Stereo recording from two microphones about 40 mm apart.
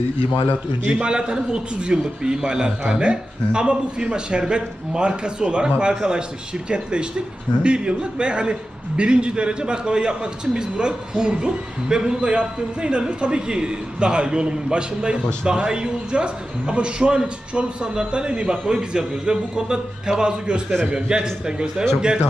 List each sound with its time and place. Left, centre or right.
0.9 s a man's voice: right